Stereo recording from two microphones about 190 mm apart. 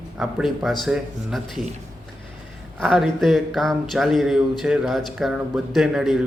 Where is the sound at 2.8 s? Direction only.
Centre (ahead or behind).